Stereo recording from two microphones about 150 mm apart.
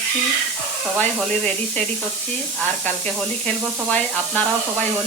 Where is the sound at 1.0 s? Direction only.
5° left (ahead or behind).